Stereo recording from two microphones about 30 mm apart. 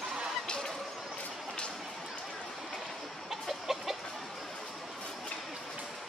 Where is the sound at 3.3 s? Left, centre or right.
Centre.